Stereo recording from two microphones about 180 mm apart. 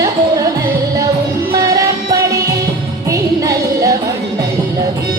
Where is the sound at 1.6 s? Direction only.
20° right (ahead or behind).